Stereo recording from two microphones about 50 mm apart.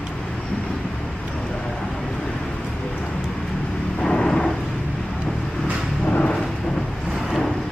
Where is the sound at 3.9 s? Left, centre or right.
Centre.